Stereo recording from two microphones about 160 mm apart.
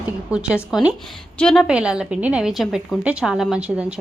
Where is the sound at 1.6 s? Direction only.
5° right (ahead or behind).